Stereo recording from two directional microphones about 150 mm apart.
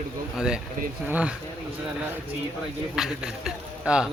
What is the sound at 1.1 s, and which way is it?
Speech, 10° right (ahead or behind).